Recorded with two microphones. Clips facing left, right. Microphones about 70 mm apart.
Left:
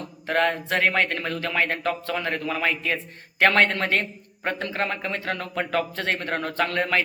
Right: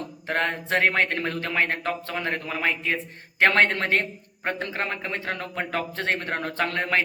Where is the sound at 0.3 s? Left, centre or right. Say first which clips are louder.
Left 3 dB; right.